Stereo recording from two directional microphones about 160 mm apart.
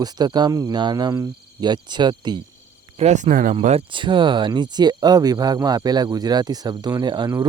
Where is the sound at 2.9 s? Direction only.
45° right (ahead or behind).